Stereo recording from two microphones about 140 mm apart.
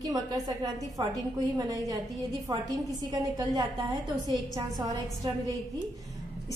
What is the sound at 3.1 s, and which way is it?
A woman's voice, 25° right (ahead or behind).